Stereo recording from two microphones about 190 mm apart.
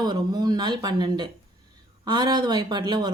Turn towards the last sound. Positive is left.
turn(degrees=-20)  # may be behind; listen again after turning